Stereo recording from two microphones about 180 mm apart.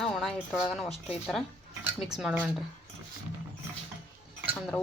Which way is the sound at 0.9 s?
35° left (ahead or behind).